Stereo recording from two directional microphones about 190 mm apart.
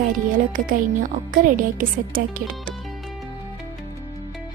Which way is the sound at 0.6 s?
45° right (ahead or behind).